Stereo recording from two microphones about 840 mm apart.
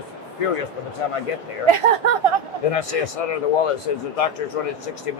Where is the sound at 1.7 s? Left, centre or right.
Right.